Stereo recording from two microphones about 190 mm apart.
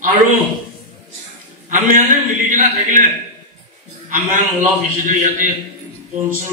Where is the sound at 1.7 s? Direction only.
40° right (ahead or behind).